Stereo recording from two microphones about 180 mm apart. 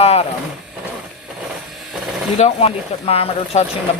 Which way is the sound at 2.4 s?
35° left (ahead or behind).